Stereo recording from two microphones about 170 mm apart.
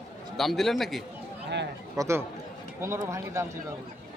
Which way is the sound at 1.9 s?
15° right (ahead or behind).